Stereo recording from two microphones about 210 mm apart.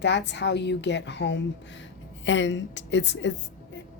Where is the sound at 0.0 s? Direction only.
55° left (ahead or behind).